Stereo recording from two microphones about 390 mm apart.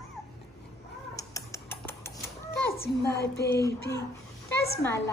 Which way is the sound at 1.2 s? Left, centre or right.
Centre.